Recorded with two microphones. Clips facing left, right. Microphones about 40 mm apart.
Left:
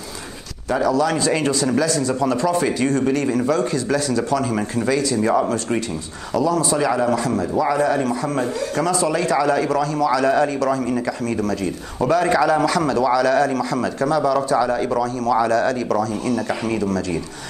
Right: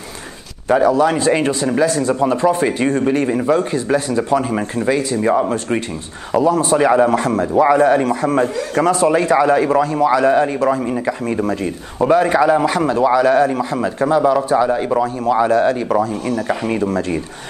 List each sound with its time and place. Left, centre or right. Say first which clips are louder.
0.7 s speech: right 5 dB; right